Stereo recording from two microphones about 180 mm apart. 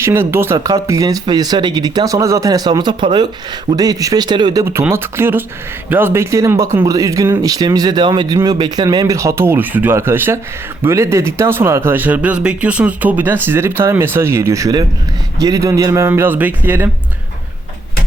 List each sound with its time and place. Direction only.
0.0 s speech: 15° right (ahead or behind)